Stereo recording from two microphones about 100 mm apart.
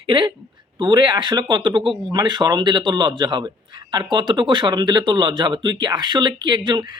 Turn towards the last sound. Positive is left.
turn(degrees=-50)  # may be behind; listen again after turning